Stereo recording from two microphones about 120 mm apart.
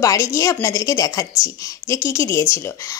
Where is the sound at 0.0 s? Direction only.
25° left (ahead or behind).